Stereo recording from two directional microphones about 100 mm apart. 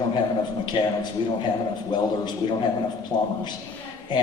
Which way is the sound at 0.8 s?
60° left (ahead or behind).